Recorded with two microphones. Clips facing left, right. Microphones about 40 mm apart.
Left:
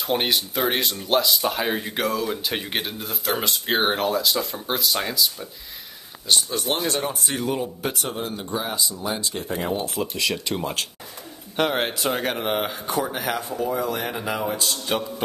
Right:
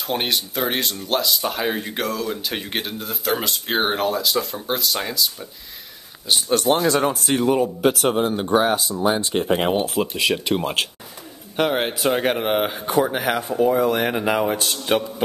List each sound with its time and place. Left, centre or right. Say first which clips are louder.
0.0 s speech: even; centre
6.5 s speech: right 7 dB; right
8.0 s speech: right 9 dB; right
8.5 s speech: right 8 dB; right
9.3 s speech: right 7 dB; right
9.8 s speech: right 5 dB; right
10.1 s speech: right 4 dB; right
11.5 s a man's voice: right 2 dB; centre
11.9 s speech: right 5 dB; centre
12.9 s speech: right 6 dB; right
14.9 s speech: right 6 dB; right